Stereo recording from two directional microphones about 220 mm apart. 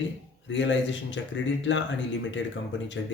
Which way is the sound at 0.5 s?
55° left (ahead or behind).